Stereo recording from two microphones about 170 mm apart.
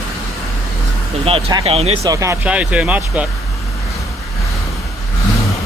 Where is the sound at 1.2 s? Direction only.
35° right (ahead or behind).